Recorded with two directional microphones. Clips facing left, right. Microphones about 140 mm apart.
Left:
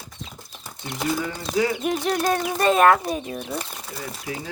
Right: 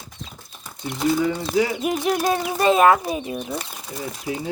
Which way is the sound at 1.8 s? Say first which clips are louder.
Right 1 dB; 10° right (ahead or behind).